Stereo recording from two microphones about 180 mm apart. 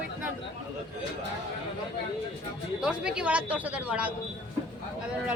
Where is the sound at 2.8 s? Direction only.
5° right (ahead or behind).